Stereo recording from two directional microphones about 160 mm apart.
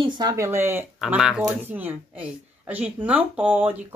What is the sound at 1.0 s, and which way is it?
A woman's voice, 5° right (ahead or behind).